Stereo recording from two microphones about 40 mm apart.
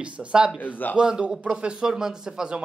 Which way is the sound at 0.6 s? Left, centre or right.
Left.